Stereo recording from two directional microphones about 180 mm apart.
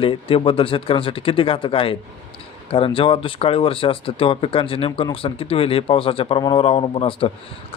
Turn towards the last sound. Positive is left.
turn(degrees=30)  # may be behind; listen again after turning